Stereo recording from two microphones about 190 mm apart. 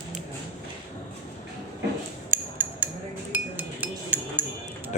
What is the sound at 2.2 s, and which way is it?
Cutlery, 10° right (ahead or behind).